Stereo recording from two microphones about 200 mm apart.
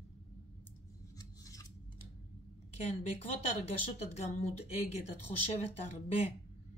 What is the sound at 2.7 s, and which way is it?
Speech, 35° left (ahead or behind).